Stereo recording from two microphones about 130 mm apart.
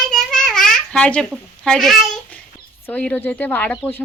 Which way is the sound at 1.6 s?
5° left (ahead or behind).